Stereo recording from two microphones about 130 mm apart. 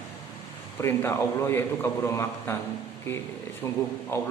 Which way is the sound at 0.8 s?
20° left (ahead or behind).